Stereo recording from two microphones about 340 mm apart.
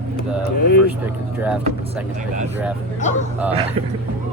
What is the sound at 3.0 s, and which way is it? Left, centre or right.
Speech, left.